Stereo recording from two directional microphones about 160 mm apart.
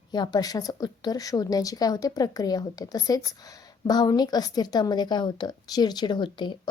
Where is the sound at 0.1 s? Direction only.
25° left (ahead or behind).